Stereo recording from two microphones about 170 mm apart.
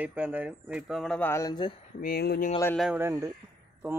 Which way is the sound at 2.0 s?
65° left (ahead or behind).